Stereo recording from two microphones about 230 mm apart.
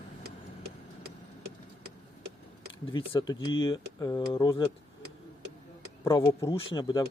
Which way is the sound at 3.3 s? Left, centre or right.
Left.